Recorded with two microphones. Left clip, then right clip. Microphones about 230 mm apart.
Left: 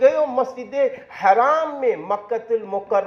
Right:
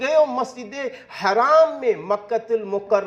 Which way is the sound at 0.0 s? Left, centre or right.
Right.